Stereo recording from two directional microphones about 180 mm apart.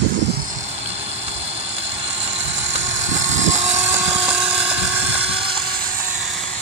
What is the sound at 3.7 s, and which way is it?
Vehicle, 10° right (ahead or behind).